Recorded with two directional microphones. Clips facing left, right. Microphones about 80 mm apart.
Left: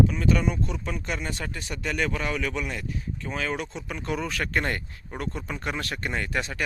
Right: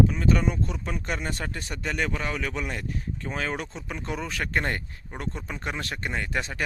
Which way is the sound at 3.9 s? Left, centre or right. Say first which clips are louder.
Left 3 dB; right.